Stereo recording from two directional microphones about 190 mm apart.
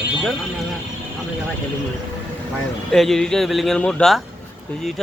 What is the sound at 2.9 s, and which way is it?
Speech, centre (ahead or behind).